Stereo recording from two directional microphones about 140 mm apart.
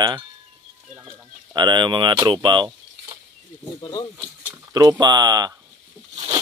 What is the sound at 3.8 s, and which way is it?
Speech, 30° left (ahead or behind).